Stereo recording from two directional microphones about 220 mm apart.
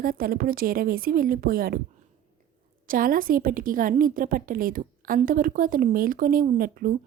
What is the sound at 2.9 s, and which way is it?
A woman's voice, 40° right (ahead or behind).